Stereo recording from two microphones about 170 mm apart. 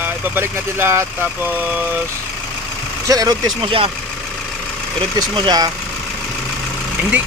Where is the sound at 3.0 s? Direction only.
20° right (ahead or behind).